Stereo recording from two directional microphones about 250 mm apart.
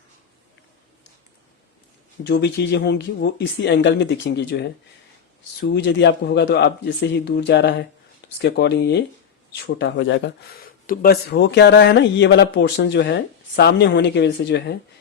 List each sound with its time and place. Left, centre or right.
2.2 s speech: left